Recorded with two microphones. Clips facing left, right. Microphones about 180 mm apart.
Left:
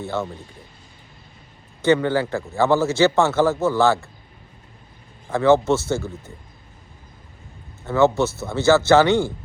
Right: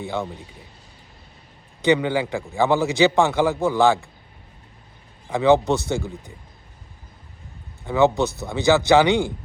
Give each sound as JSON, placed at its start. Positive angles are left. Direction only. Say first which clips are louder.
{"t": 0.0, "sound": "a man's voice", "louder": "left 1 dB", "side_deg": -15}
{"t": 1.8, "sound": "a man's voice", "louder": "left 1 dB", "side_deg": -15}
{"t": 5.3, "sound": "a man's voice", "louder": "left 1 dB", "side_deg": -15}
{"t": 7.9, "sound": "a man's voice", "louder": "left 1 dB", "side_deg": -15}